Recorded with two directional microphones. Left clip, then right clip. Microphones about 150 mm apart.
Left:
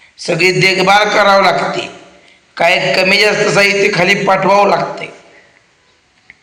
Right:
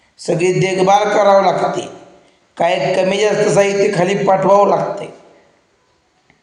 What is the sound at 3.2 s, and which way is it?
Speech, 25° left (ahead or behind).